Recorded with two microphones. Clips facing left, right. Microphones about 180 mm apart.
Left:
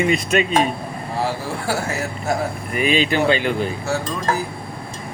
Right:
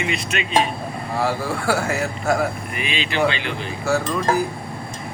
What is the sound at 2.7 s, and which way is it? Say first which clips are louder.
Speech: left 7 dB; 45° left (ahead or behind).